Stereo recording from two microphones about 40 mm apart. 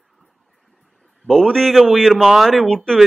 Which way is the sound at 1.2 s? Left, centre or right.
Centre.